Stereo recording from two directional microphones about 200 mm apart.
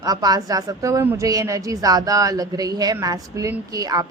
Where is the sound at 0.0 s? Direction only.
20° right (ahead or behind).